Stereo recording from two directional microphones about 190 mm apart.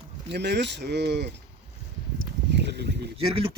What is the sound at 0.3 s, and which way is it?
Speech, 60° right (ahead or behind).